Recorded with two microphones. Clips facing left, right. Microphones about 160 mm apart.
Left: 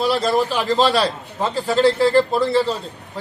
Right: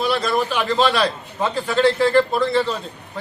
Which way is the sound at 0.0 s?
40° left (ahead or behind).